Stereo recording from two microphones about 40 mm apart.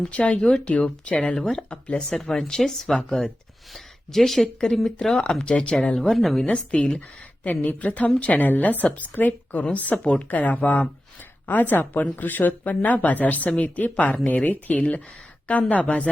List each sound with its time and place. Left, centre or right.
0.1 s a woman's voice: left
2.0 s speech: centre
6.0 s speech: centre
6.4 s speech: left
7.4 s a woman's voice: left
8.4 s speech: left
10.0 s a woman's voice: left
11.4 s a woman's voice: left
14.8 s a woman's voice: left